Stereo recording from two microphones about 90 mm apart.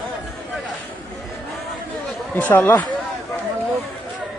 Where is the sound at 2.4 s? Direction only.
25° left (ahead or behind).